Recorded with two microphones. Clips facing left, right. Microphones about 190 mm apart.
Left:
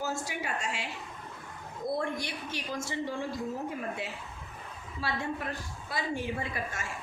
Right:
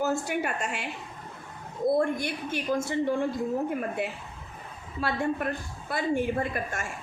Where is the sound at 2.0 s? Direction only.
55° right (ahead or behind).